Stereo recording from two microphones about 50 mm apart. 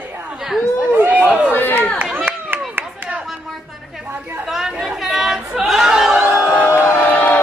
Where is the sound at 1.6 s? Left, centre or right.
Left.